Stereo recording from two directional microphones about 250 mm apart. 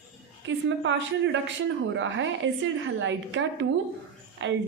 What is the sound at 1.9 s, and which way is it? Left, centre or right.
A woman's voice, right.